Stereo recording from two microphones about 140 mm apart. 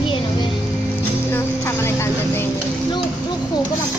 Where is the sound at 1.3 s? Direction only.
15° left (ahead or behind).